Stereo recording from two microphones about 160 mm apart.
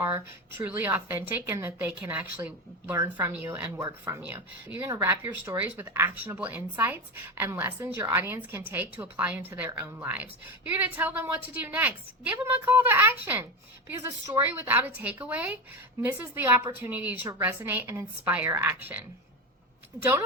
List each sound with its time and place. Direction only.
0.0 s a woman's voice: 15° right (ahead or behind)